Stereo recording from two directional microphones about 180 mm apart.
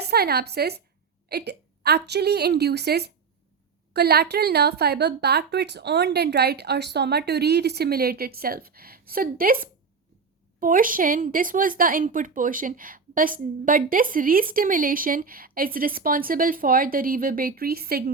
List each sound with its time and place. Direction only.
0.0 s a woman's voice: 60° right (ahead or behind)